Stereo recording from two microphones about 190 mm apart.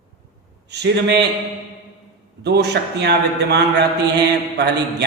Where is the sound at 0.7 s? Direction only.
60° right (ahead or behind).